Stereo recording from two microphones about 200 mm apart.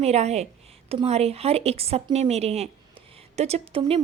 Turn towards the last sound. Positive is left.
turn(degrees=-30)  # may be behind; listen again after turning